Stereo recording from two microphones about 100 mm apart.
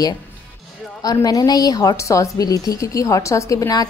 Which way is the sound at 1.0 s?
40° left (ahead or behind).